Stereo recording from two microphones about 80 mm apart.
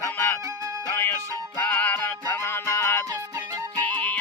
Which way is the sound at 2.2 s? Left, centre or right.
Left.